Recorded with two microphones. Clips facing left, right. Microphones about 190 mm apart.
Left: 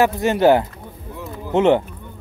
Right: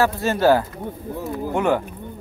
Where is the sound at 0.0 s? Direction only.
20° left (ahead or behind).